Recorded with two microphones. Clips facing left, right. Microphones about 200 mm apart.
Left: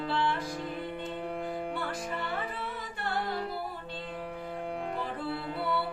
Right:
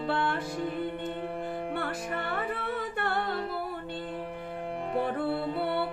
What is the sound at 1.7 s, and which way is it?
Music, 60° right (ahead or behind).